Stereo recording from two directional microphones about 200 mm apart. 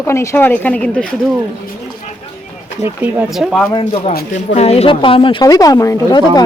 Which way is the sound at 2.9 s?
10° right (ahead or behind).